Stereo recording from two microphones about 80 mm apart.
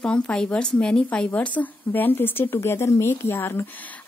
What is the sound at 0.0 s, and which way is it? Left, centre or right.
Speech, centre.